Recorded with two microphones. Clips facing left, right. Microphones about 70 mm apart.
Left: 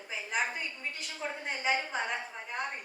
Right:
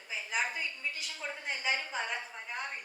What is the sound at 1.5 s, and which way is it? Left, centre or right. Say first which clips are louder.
Speech: left 3 dB; left.